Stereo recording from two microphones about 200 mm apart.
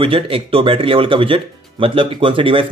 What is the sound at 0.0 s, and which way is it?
Speech, 25° right (ahead or behind).